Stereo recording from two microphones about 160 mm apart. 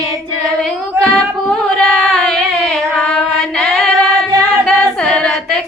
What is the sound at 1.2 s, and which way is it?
Singing, 5° left (ahead or behind).